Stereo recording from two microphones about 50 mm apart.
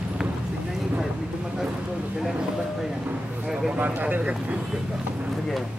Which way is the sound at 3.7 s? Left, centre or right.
Right.